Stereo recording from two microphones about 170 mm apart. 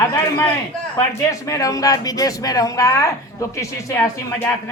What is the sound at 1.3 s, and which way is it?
Speech, 20° left (ahead or behind).